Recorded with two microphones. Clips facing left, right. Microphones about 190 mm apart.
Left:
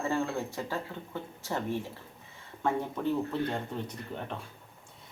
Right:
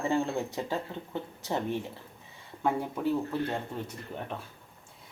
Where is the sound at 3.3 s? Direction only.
5° right (ahead or behind).